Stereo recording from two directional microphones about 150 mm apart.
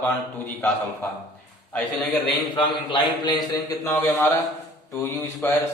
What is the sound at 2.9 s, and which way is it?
Speech, 30° left (ahead or behind).